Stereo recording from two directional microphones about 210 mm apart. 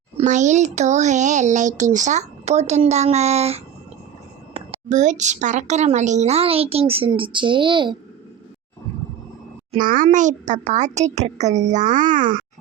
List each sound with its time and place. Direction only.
0.2 s a woman's voice: 35° right (ahead or behind)
9.8 s speech: 40° right (ahead or behind)